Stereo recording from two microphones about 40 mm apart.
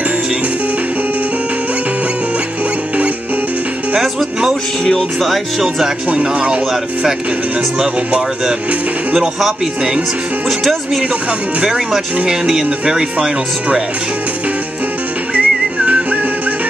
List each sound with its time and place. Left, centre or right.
5.2 s speech: centre
6.0 s speech: right
10.6 s speech: centre
11.6 s speech: centre
15.3 s whistling: right